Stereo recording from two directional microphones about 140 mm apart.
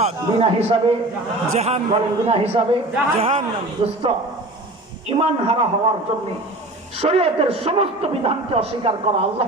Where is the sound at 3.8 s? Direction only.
40° right (ahead or behind).